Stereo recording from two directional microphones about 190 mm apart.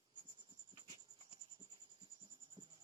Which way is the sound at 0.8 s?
20° right (ahead or behind).